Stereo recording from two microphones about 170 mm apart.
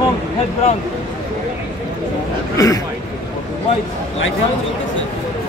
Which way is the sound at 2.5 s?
20° left (ahead or behind).